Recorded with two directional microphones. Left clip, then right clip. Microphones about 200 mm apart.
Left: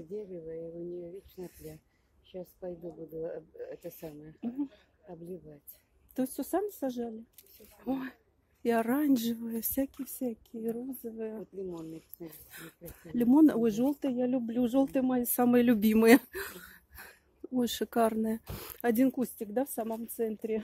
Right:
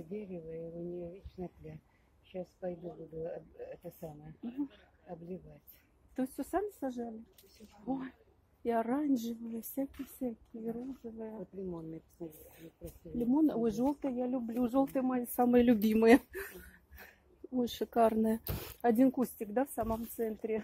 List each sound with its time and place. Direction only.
2.3 s speech: 45° left (ahead or behind)
6.1 s speech: 40° left (ahead or behind); by 17.1 s 20° left (ahead or behind)
17.6 s speech: 30° left (ahead or behind)